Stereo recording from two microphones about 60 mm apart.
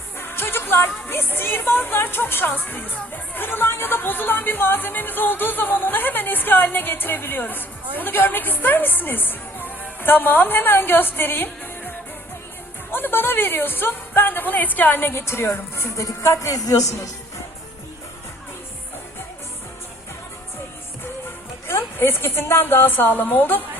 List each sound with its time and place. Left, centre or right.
0.2 s speech: left
15.1 s a woman's voice: left
21.7 s speech: left